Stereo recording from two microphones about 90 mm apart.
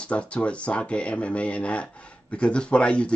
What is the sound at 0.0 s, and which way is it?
Speech, 15° left (ahead or behind).